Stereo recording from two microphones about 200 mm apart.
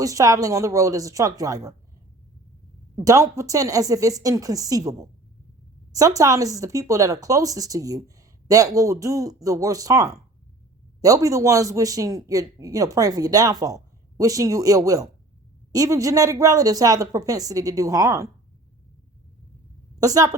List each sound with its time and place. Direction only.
0.0 s speech: 15° right (ahead or behind)
2.9 s speech: 15° right (ahead or behind)
20.0 s speech: 15° right (ahead or behind)